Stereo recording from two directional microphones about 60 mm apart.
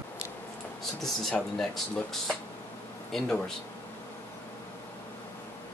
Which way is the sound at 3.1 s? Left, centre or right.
Centre.